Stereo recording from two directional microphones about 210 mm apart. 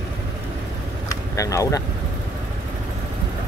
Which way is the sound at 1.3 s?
15° left (ahead or behind).